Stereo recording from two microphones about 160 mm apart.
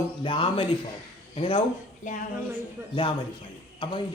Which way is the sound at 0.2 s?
35° left (ahead or behind).